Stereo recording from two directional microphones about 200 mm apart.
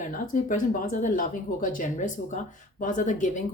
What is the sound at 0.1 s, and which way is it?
Speech, 40° left (ahead or behind).